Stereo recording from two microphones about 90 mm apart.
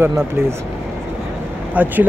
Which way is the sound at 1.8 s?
20° right (ahead or behind).